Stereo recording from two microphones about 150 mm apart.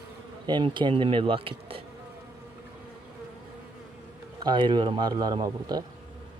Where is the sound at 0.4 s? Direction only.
30° right (ahead or behind).